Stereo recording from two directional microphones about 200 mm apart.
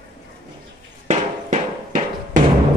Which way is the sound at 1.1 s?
35° right (ahead or behind).